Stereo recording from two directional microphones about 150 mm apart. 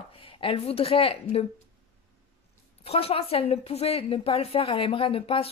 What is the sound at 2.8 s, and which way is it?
A woman's voice, 40° left (ahead or behind).